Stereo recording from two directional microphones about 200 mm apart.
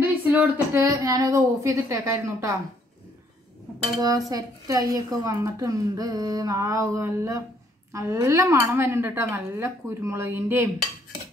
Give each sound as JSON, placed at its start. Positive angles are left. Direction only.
{"t": 0.0, "sound": "a woman's voice", "side_deg": -10}
{"t": 4.3, "sound": "a woman's voice", "side_deg": -15}